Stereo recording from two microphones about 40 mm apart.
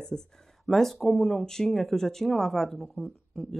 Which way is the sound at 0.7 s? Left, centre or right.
Centre.